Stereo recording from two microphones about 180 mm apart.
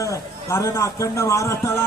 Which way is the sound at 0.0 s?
15° left (ahead or behind).